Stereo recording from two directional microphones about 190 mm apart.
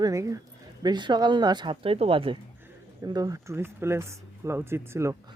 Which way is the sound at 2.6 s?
15° right (ahead or behind).